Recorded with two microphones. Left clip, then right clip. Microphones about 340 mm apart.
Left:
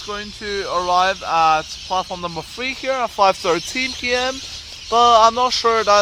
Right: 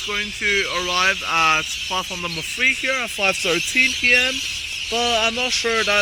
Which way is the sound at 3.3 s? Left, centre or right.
Left.